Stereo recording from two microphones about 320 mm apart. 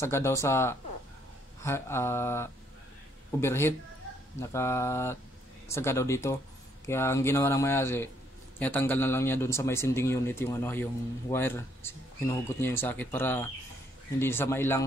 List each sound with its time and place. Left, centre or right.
0.0 s a man's voice: centre